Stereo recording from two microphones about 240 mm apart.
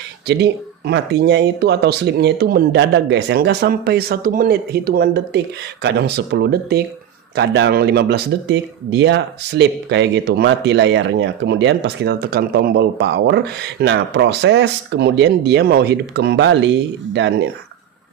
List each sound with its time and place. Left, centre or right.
0.3 s speech: right